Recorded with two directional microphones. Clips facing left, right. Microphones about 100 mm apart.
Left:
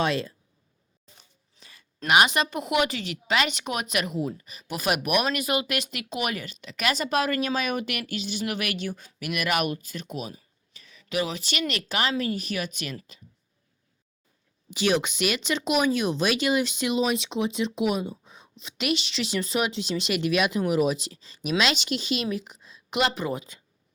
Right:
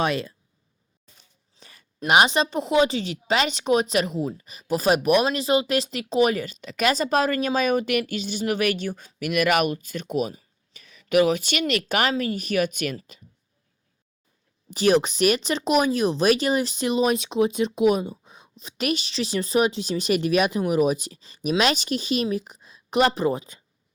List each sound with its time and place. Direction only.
1.5 s a sound: 35° right (ahead or behind)
2.0 s speech: 35° right (ahead or behind)
11.7 s speech: 50° right (ahead or behind)
14.7 s speech: 40° right (ahead or behind)